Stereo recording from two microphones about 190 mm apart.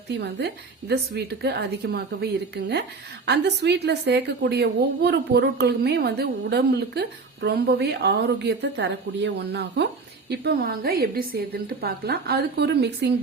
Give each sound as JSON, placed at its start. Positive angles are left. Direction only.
{"t": 0.2, "sound": "a woman's voice", "side_deg": -60}